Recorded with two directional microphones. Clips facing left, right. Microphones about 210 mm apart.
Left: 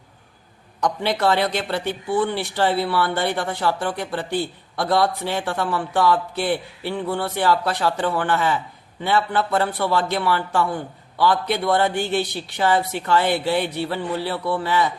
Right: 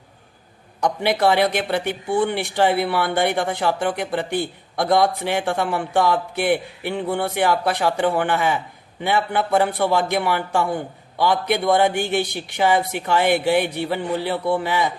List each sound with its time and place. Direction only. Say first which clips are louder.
0.8 s speech: right 2 dB; 10° right (ahead or behind)